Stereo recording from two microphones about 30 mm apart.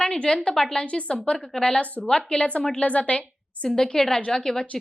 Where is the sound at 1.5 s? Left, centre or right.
Left.